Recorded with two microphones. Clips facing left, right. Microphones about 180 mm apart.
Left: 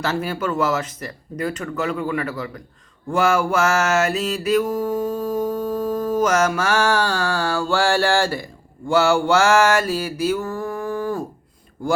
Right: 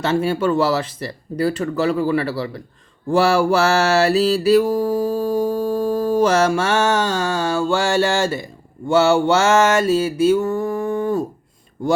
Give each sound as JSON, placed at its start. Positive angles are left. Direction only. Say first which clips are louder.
{"t": 0.0, "sound": "mantra", "louder": "right 5 dB", "side_deg": -25}